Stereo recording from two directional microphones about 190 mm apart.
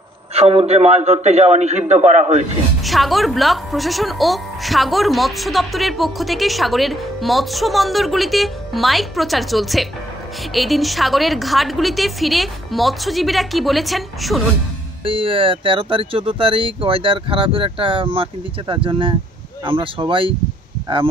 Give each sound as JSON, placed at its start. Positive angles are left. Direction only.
{"t": 0.3, "sound": "a man's voice", "side_deg": -35}
{"t": 2.8, "sound": "speech", "side_deg": 0}
{"t": 15.0, "sound": "speech", "side_deg": -30}